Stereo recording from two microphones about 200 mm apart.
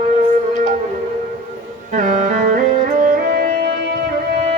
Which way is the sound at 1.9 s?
40° right (ahead or behind).